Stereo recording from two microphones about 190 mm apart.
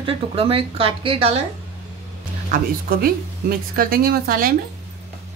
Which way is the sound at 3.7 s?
50° right (ahead or behind).